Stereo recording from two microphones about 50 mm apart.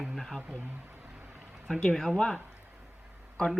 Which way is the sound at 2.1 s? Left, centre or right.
Centre.